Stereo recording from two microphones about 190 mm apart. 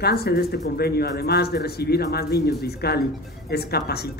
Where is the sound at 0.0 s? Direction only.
55° left (ahead or behind).